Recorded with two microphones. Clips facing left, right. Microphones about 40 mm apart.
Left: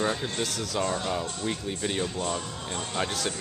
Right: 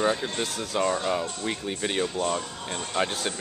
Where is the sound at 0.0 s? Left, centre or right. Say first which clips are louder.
Right 3 dB; centre.